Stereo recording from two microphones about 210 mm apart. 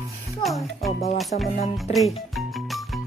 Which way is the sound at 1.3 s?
40° left (ahead or behind).